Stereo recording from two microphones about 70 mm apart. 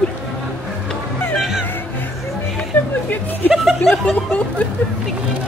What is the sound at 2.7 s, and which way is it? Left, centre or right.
Music, left.